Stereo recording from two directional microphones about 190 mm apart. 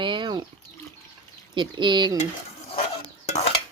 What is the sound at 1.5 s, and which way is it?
Speech, 25° right (ahead or behind).